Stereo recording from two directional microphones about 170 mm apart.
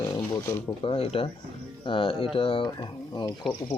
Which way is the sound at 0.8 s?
30° left (ahead or behind).